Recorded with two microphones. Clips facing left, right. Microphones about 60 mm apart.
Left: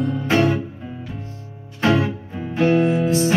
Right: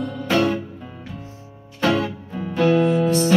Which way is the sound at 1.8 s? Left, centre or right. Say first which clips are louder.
Left 2 dB; left.